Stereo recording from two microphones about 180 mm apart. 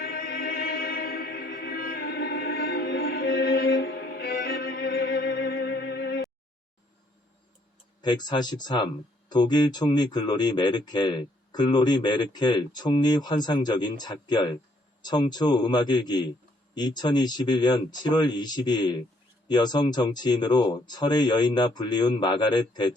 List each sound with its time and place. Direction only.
0.0 s music: 60° left (ahead or behind)
8.0 s speech: 25° left (ahead or behind)